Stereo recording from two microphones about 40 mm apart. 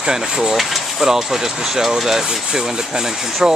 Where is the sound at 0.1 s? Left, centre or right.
Centre.